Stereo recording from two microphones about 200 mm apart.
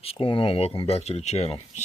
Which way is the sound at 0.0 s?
30° left (ahead or behind).